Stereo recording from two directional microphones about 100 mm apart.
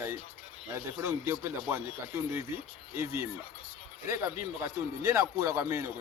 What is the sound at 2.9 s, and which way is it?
A man's voice, 30° right (ahead or behind).